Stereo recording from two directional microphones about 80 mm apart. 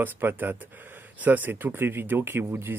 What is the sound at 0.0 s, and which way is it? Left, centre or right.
Speech, right.